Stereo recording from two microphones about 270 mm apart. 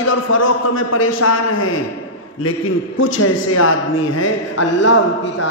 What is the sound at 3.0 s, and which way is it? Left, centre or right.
A man's voice, left.